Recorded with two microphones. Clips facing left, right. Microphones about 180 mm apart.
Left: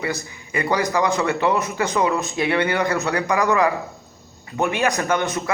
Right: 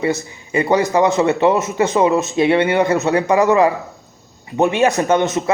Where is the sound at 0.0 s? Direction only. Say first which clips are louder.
Right 7 dB; 25° right (ahead or behind).